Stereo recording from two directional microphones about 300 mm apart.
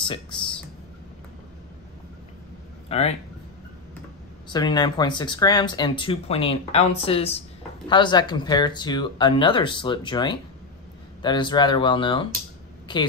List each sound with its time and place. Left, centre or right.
0.0 s speech: centre
2.9 s speech: centre
4.5 s speech: centre